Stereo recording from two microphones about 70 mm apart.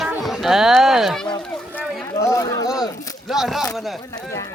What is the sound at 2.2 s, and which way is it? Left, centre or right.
Speech, left.